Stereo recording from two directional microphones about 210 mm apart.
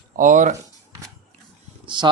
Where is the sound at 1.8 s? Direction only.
20° right (ahead or behind).